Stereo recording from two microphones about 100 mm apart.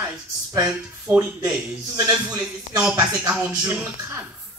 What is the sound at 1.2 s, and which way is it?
A man's voice, 35° right (ahead or behind).